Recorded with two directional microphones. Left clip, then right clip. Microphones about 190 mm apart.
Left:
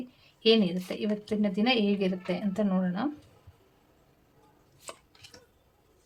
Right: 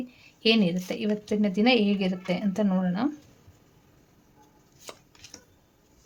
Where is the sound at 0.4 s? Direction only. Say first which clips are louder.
Even; 35° right (ahead or behind).